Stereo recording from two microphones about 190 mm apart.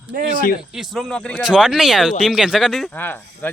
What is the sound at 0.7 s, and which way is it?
Speech, centre (ahead or behind).